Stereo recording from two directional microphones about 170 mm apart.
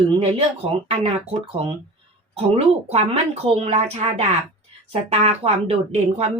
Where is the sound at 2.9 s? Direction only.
40° right (ahead or behind).